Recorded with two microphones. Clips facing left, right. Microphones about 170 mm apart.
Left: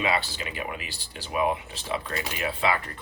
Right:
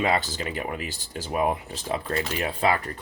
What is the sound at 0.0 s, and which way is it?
Speech, 45° right (ahead or behind).